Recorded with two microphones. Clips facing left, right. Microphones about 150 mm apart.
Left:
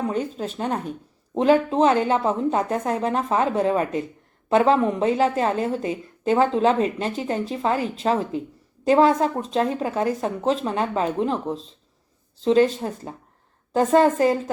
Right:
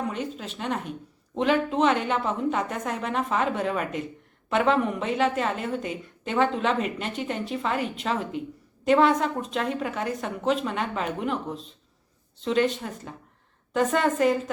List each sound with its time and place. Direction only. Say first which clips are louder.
0.1 s speech: left 6 dB; 40° left (ahead or behind)